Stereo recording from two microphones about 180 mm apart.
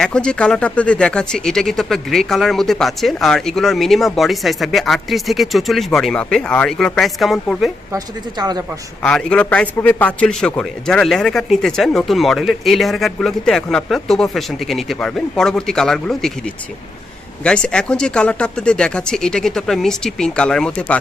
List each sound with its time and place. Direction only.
0.0 s speech: 5° left (ahead or behind)
7.9 s speech: 20° right (ahead or behind)
9.0 s speech: 5° left (ahead or behind)
17.4 s speech: 5° left (ahead or behind)